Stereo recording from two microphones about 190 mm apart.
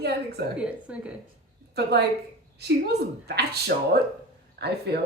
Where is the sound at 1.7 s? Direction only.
60° right (ahead or behind).